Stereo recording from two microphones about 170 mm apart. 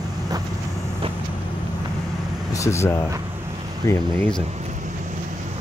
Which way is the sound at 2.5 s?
15° left (ahead or behind).